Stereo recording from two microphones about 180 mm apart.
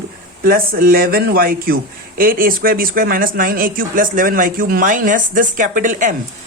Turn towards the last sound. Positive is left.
turn(degrees=-45)  # may be behind; listen again after turning